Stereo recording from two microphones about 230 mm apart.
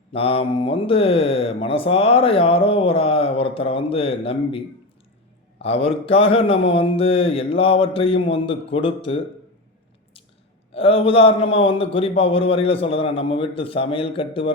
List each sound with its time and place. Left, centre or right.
0.1 s speech: left
5.6 s speech: left
10.8 s speech: left